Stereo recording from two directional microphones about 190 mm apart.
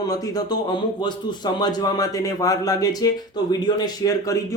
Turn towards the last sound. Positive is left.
turn(degrees=20)  # may be behind; listen again after turning